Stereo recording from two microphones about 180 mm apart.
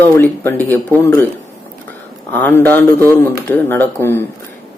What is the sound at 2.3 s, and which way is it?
Speech, 10° left (ahead or behind).